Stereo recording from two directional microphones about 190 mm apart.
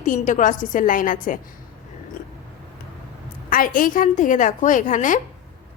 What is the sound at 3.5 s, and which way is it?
A woman's voice, 45° left (ahead or behind).